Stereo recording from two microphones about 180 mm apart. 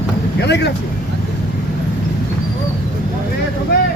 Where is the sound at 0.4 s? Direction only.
70° left (ahead or behind).